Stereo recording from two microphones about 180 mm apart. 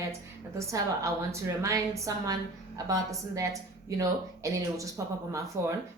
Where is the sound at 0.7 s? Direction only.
15° right (ahead or behind).